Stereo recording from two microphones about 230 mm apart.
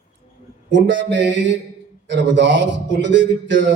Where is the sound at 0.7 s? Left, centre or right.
Right.